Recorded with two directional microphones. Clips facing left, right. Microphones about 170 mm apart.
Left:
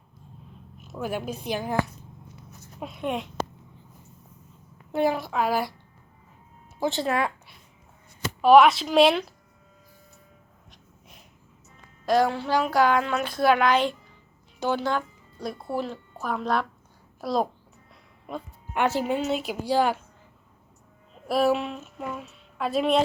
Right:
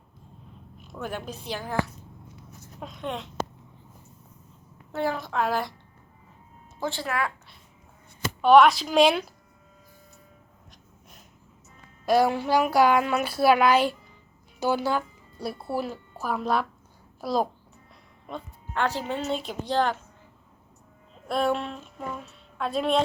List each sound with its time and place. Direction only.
0.9 s a woman's voice: 10° left (ahead or behind)
4.9 s a woman's voice: 15° left (ahead or behind)
6.7 s speech: 20° left (ahead or behind)
8.4 s a woman's voice: 5° left (ahead or behind)
12.0 s a woman's voice: 10° right (ahead or behind)
18.3 s music: 10° left (ahead or behind)
18.9 s a woman's voice: 10° left (ahead or behind)
21.2 s a woman's voice: 5° left (ahead or behind)